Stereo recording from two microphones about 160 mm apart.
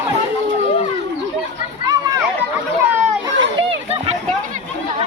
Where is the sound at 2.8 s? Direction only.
15° right (ahead or behind).